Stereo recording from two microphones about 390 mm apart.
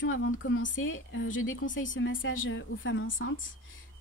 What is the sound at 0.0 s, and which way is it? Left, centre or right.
A woman's voice, left.